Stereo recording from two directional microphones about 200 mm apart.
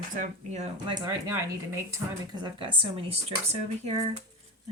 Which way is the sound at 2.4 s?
25° right (ahead or behind).